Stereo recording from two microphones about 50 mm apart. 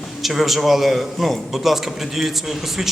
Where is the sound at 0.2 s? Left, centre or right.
Centre.